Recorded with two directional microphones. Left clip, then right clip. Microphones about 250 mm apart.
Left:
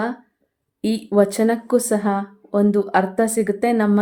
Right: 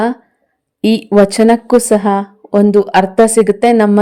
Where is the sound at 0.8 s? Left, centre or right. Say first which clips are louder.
Right 8 dB; right.